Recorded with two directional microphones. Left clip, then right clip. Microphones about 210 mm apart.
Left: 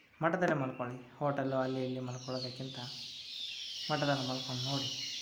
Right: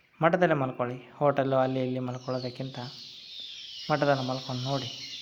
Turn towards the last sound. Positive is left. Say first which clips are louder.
# right 5 dB
turn(degrees=-40)  # may be behind; listen again after turning